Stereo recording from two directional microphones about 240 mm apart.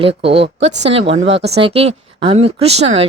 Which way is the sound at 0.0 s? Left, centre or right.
Right.